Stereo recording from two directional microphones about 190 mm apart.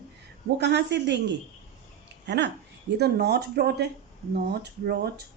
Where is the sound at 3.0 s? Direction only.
60° right (ahead or behind).